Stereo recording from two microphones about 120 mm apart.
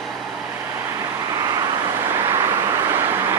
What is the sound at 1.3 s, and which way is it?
Vehicle, 30° right (ahead or behind).